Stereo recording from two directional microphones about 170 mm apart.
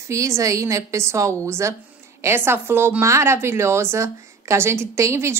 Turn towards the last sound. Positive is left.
turn(degrees=-15)  # may be behind; listen again after turning